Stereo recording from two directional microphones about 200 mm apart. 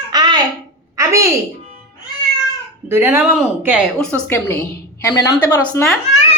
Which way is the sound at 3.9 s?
5° left (ahead or behind).